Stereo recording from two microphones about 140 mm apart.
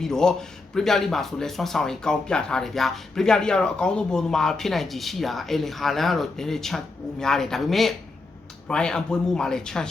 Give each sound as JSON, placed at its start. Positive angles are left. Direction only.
{"t": 0.0, "sound": "speech", "side_deg": 5}